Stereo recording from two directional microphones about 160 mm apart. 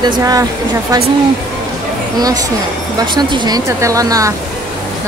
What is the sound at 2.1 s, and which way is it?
A woman's voice, 25° right (ahead or behind).